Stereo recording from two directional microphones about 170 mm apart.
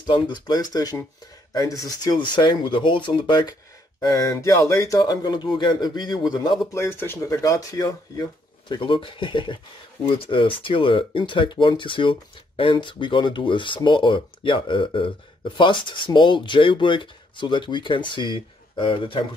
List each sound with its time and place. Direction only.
0.0 s speech: 25° left (ahead or behind)
6.7 s speech: 15° left (ahead or behind); by 19.2 s 30° left (ahead or behind)